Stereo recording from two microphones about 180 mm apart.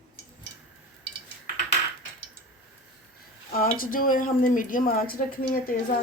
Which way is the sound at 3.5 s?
50° left (ahead or behind).